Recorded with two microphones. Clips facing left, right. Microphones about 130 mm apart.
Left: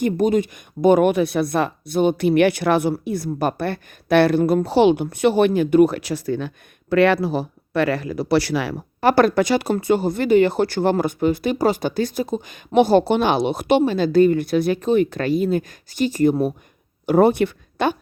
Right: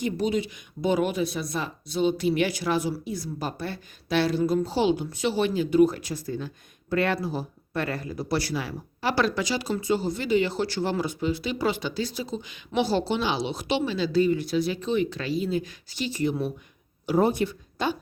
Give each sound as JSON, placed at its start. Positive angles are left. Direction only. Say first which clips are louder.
{"t": 0.0, "sound": "speech", "louder": "left 8 dB", "side_deg": 50}
{"t": 17.1, "sound": "speech", "louder": "left 7 dB", "side_deg": 65}